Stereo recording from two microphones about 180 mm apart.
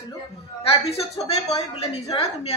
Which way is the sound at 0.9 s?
35° left (ahead or behind).